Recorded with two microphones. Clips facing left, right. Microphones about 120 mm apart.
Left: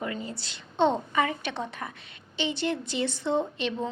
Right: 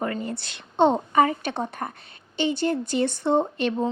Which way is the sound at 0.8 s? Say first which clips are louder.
Right 5 dB; 40° right (ahead or behind).